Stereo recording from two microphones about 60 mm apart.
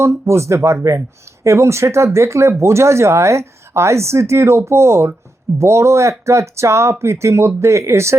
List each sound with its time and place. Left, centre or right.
0.0 s speech: right